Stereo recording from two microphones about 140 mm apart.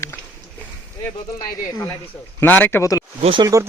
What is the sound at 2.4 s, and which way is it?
Speech, 15° left (ahead or behind).